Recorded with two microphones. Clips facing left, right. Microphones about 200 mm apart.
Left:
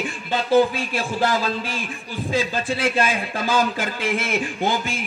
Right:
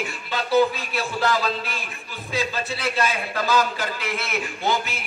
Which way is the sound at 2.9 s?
30° left (ahead or behind).